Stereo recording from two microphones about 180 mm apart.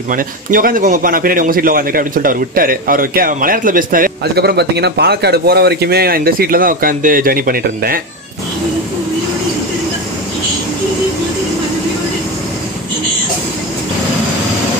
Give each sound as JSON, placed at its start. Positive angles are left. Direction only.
{"t": 0.1, "sound": "a man's voice", "side_deg": -50}